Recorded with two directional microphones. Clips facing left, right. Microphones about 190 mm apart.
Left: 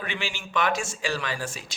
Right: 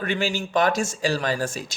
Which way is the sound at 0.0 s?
40° right (ahead or behind).